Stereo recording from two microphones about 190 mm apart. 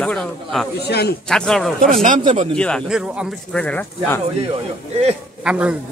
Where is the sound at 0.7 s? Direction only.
60° left (ahead or behind).